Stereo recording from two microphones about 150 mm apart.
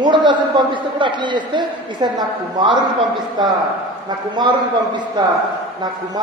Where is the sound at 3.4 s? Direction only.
30° right (ahead or behind).